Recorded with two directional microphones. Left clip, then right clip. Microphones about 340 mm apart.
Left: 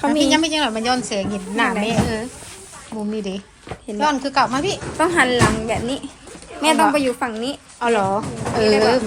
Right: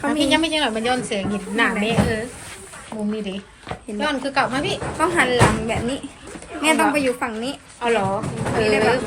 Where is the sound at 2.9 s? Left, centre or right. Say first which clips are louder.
Left 1 dB; centre.